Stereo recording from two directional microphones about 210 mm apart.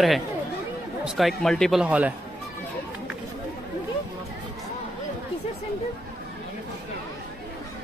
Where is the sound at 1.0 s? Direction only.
Centre (ahead or behind).